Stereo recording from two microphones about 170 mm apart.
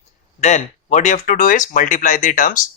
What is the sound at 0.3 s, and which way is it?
Speech, 45° left (ahead or behind).